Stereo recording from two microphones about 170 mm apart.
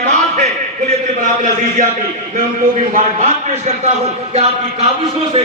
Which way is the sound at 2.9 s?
45° right (ahead or behind).